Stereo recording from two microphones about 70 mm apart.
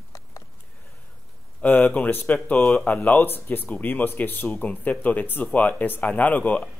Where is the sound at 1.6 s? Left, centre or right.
Left.